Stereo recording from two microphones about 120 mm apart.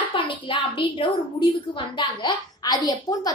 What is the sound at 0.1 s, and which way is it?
A child's voice, 45° left (ahead or behind).